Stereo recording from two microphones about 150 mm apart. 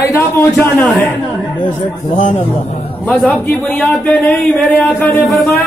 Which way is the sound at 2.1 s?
55° left (ahead or behind).